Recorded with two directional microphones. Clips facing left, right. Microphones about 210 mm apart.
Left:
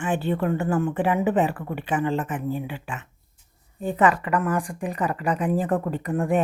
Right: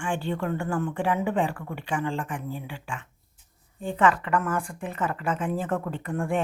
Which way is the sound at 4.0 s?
15° left (ahead or behind).